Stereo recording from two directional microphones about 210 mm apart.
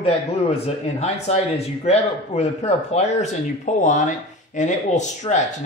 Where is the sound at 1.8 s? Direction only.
30° left (ahead or behind).